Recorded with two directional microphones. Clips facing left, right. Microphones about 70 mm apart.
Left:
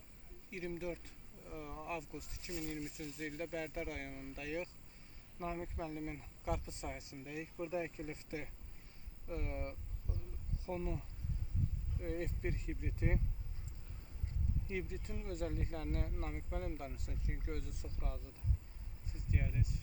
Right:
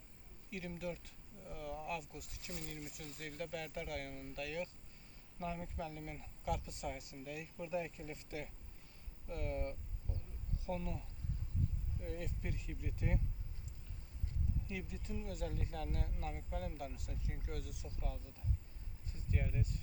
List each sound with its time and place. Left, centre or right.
0.5 s speech: left
12.0 s speech: left
14.7 s speech: left
19.3 s speech: centre